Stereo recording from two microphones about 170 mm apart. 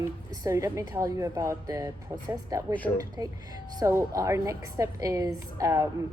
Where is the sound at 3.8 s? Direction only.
20° right (ahead or behind).